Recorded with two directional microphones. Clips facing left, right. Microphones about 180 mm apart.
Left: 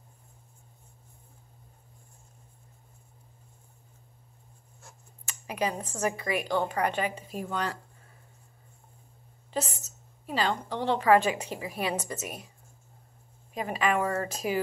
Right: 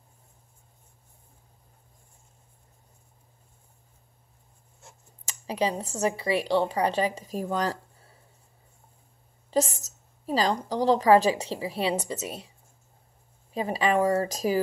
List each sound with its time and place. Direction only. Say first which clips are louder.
5.5 s speech: right 3 dB; 30° right (ahead or behind)
9.5 s a woman's voice: right 7 dB; 40° right (ahead or behind)
13.5 s speech: right 3 dB; 35° right (ahead or behind)